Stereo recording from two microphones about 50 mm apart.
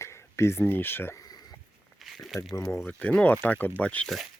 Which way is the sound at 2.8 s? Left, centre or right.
Left.